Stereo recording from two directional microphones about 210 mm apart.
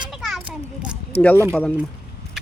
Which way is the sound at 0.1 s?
Centre (ahead or behind).